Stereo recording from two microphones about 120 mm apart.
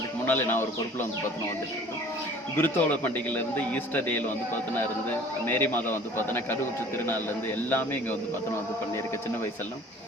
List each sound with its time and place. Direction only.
0.3 s a man's voice: 20° left (ahead or behind)
2.6 s a man's voice: 15° left (ahead or behind)
5.5 s a man's voice: 15° left (ahead or behind)